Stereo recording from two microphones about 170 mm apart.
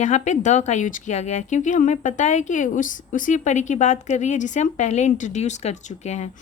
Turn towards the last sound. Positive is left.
turn(degrees=40)  # may be behind; listen again after turning